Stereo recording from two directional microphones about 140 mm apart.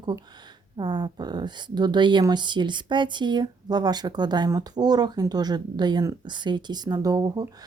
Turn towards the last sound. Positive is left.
turn(degrees=-25)  # may be behind; listen again after turning